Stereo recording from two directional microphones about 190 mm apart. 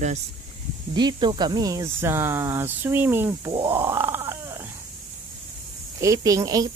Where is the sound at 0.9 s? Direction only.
25° right (ahead or behind).